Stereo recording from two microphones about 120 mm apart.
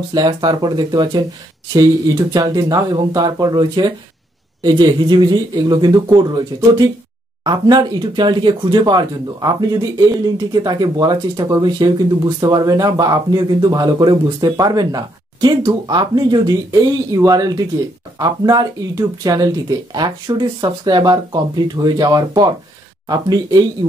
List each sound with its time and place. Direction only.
0.1 s speech: 35° right (ahead or behind)
2.3 s speech: 30° right (ahead or behind)